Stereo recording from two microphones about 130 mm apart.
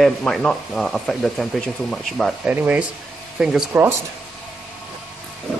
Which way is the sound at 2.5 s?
10° right (ahead or behind).